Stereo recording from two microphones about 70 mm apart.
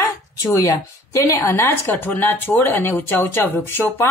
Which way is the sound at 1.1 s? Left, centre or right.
Left.